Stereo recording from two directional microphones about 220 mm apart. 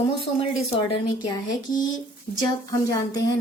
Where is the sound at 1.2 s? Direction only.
20° left (ahead or behind).